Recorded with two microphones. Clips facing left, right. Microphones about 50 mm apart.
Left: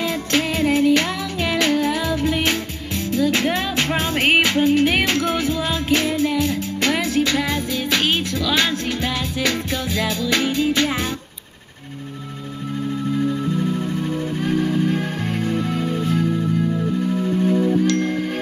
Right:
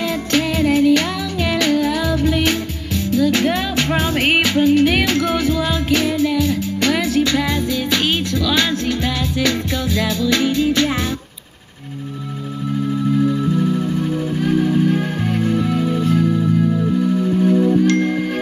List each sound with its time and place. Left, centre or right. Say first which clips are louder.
0.4 s music: right 3 dB; centre; by 10.9 s left
13.2 s music: right 4 dB; centre
17.8 s music: right 3 dB; right